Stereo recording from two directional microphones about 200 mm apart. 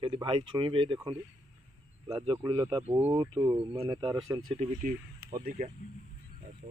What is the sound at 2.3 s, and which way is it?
Speech, 15° right (ahead or behind).